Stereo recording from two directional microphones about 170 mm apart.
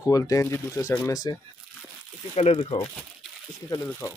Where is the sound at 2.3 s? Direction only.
40° left (ahead or behind).